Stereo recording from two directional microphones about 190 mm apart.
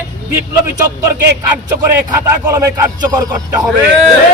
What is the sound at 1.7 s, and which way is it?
Speech, 15° right (ahead or behind).